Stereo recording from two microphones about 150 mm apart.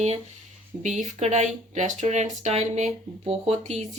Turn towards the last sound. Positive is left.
turn(degrees=-45)  # may be behind; listen again after turning